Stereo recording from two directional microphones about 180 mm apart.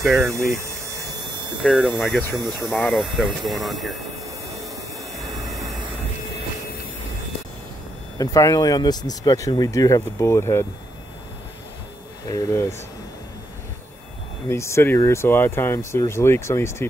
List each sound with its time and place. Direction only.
0.2 s speech: 15° right (ahead or behind)
1.6 s speech: centre (ahead or behind)
5.1 s a sound: centre (ahead or behind)
8.2 s speech: 20° left (ahead or behind)
12.3 s speech: 15° left (ahead or behind)
14.5 s speech: 15° left (ahead or behind)